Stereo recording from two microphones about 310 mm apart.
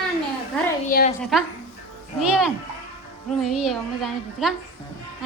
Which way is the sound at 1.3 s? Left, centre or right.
Centre.